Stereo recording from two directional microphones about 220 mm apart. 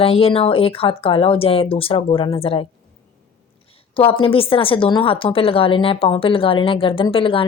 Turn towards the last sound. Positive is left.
turn(degrees=25)  # may be behind; listen again after turning